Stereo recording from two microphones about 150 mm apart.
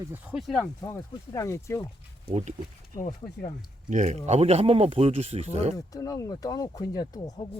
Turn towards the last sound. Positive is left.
turn(degrees=25)  # may be behind; listen again after turning